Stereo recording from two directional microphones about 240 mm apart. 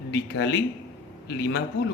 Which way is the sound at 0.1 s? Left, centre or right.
Left.